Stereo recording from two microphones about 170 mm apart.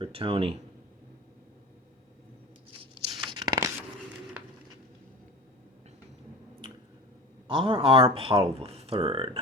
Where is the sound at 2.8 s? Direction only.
25° right (ahead or behind).